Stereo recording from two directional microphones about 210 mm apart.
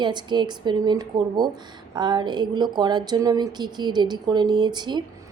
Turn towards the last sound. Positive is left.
turn(degrees=-20)  # may be behind; listen again after turning